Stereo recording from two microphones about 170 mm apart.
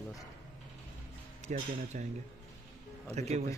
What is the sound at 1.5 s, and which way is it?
Speech, 45° right (ahead or behind).